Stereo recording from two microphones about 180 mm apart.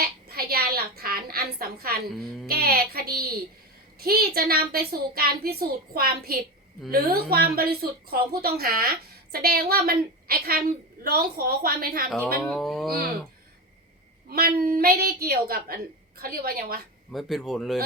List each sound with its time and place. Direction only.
0.3 s a sound: 60° right (ahead or behind)
2.5 s a woman's voice: 55° right (ahead or behind)
12.4 s speech: 5° left (ahead or behind)
14.3 s a woman's voice: 55° right (ahead or behind)
17.1 s speech: centre (ahead or behind)